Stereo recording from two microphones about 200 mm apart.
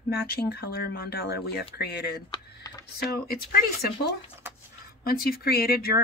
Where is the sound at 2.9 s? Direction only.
50° left (ahead or behind).